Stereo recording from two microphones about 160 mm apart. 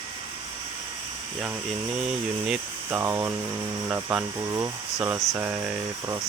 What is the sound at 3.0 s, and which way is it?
Speech, 20° right (ahead or behind).